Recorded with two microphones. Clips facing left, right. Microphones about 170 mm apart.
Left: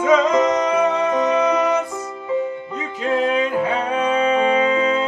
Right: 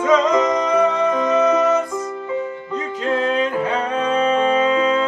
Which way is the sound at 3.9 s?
10° left (ahead or behind).